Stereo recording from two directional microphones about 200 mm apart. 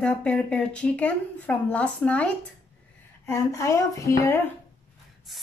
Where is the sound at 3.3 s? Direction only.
15° left (ahead or behind).